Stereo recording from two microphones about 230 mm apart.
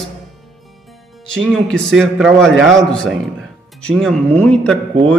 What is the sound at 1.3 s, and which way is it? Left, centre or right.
Speech, centre.